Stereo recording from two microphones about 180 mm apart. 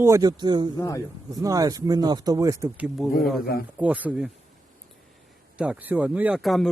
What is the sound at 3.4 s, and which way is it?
Speech, 55° left (ahead or behind).